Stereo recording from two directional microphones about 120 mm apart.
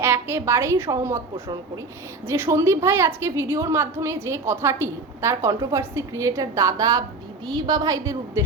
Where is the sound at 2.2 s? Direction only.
20° right (ahead or behind).